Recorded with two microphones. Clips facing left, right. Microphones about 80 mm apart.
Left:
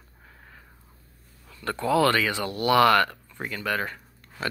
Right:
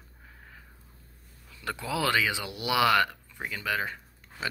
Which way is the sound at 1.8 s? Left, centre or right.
Centre.